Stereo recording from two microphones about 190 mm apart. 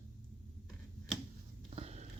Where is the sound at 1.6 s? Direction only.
35° right (ahead or behind).